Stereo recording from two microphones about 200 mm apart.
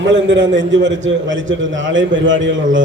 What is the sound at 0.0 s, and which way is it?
A man's voice, 65° right (ahead or behind).